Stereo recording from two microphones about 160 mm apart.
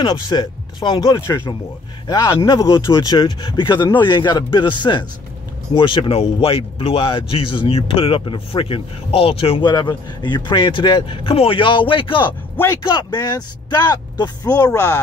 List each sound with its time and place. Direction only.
0.0 s speech: 30° left (ahead or behind)